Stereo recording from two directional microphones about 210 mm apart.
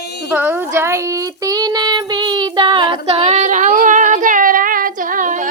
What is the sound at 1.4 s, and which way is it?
Child singing, 20° right (ahead or behind).